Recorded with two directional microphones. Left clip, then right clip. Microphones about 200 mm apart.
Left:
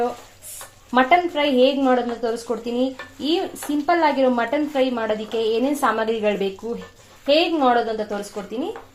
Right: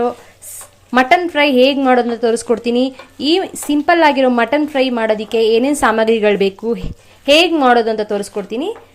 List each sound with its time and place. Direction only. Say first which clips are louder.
0.9 s a woman's voice: right 5 dB; 30° right (ahead or behind); by 8.2 s 50° right (ahead or behind)